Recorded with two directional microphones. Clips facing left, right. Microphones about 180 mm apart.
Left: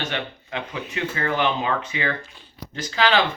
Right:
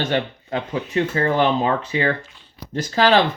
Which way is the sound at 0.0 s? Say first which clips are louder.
Right 7 dB; 40° right (ahead or behind).